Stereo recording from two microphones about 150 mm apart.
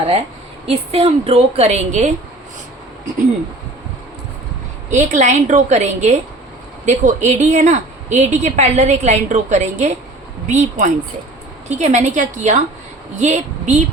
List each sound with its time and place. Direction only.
0.7 s a woman's voice: 40° right (ahead or behind)
4.9 s a woman's voice: 55° right (ahead or behind)